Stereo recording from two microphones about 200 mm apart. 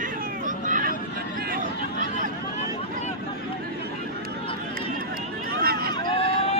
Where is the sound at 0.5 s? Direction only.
40° right (ahead or behind).